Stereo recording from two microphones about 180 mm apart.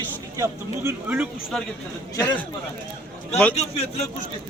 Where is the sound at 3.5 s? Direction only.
35° left (ahead or behind).